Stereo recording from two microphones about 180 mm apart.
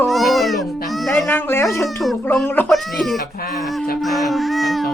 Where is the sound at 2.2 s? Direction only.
10° left (ahead or behind).